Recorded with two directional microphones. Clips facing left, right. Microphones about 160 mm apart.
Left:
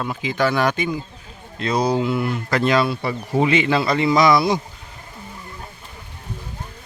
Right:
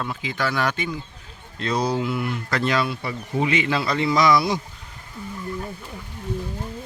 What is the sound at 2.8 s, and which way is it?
Speech, 35° left (ahead or behind).